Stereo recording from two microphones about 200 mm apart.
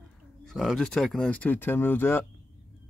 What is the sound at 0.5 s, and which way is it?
Speech, centre (ahead or behind).